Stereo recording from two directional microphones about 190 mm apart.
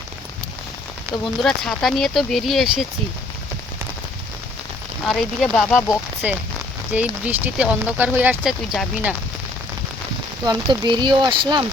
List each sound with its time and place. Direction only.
1.4 s speech: centre (ahead or behind)
5.0 s speech: 5° left (ahead or behind)
6.2 s speech: 10° right (ahead or behind)
10.4 s speech: 20° right (ahead or behind)